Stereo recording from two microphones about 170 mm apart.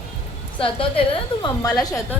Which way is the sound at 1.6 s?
20° left (ahead or behind).